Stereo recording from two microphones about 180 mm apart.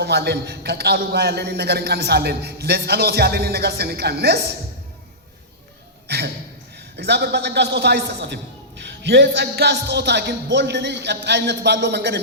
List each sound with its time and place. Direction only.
0.0 s a man's voice: 65° right (ahead or behind)
6.1 s a sound: 65° right (ahead or behind)
6.9 s a man's voice: 70° right (ahead or behind)